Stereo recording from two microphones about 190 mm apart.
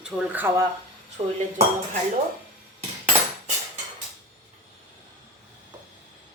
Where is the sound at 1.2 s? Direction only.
30° right (ahead or behind).